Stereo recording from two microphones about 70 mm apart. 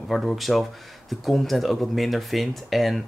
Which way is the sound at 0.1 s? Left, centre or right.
Centre.